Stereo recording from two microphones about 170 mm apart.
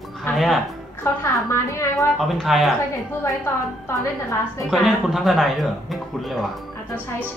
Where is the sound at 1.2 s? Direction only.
15° left (ahead or behind).